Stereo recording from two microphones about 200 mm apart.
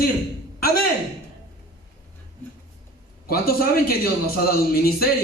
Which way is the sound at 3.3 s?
50° left (ahead or behind).